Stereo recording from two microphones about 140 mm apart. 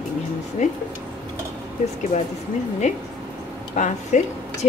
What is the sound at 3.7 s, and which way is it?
Speech, 60° left (ahead or behind).